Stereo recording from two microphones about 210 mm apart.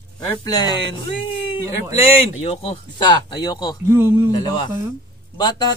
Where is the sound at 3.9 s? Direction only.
10° right (ahead or behind).